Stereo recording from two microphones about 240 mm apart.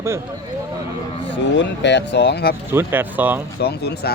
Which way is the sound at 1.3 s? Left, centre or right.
Left.